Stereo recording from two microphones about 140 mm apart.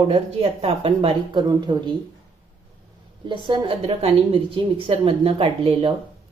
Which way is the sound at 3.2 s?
35° right (ahead or behind).